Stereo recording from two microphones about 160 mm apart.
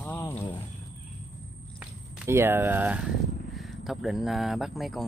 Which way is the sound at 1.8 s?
10° right (ahead or behind).